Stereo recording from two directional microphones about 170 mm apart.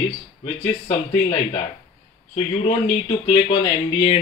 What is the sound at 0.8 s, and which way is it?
Speech, 40° left (ahead or behind).